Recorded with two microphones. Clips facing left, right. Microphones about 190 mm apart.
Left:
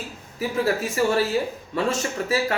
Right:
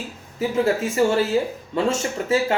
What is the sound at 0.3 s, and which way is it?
Speech, 25° right (ahead or behind).